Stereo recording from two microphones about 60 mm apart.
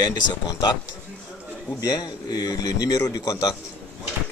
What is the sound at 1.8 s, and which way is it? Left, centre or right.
A man's voice, left.